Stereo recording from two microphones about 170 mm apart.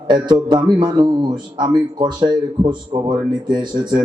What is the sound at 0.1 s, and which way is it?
A man's voice, 25° right (ahead or behind).